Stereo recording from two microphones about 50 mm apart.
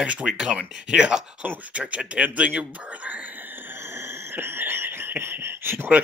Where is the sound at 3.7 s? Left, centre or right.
Right.